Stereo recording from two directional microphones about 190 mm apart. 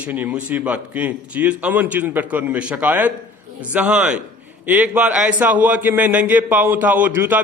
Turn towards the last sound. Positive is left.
turn(degrees=-10)  # may be behind; listen again after turning